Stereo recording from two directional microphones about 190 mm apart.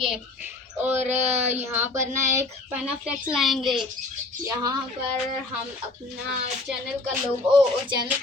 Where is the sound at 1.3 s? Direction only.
35° right (ahead or behind).